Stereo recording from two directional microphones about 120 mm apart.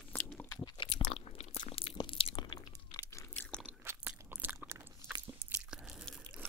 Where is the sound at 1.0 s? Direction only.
60° left (ahead or behind).